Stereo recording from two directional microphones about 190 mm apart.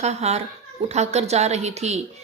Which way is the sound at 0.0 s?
35° right (ahead or behind).